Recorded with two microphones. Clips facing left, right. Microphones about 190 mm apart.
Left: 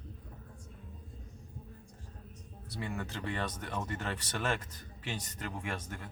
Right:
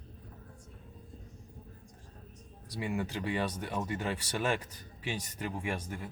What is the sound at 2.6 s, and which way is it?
Speech, 15° right (ahead or behind).